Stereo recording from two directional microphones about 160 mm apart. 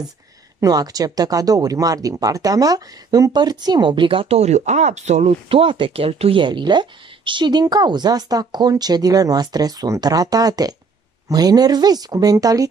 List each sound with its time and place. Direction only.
0.6 s speech: 25° right (ahead or behind)